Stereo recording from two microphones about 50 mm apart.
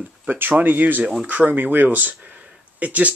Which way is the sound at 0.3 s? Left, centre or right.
Right.